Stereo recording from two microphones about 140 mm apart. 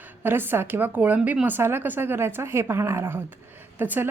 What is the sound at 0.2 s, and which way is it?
Speech, 15° right (ahead or behind).